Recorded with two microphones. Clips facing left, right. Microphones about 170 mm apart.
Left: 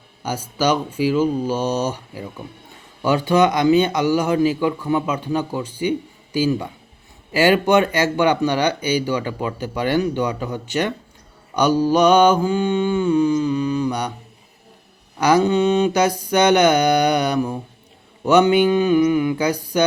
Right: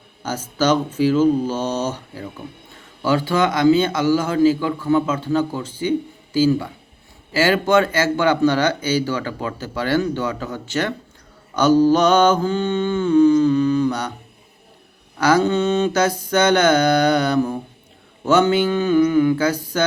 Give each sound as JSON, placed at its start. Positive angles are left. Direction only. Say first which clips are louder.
{"t": 0.2, "sound": "speech", "louder": "right 1 dB", "side_deg": 10}
{"t": 15.2, "sound": "speech", "louder": "left 1 dB", "side_deg": 15}